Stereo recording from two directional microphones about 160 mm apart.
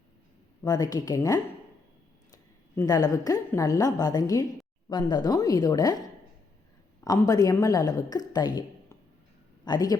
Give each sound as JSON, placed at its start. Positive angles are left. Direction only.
{"t": 0.6, "sound": "a woman's voice", "side_deg": 25}
{"t": 2.8, "sound": "a woman's voice", "side_deg": 25}
{"t": 7.0, "sound": "a woman's voice", "side_deg": 20}